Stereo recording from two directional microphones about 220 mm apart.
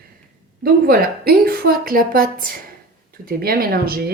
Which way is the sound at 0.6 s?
45° right (ahead or behind).